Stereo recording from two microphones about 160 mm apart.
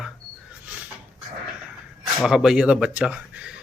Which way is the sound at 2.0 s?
Centre (ahead or behind).